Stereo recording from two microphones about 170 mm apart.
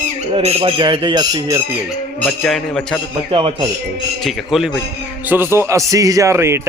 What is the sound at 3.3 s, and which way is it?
Speech, 30° right (ahead or behind).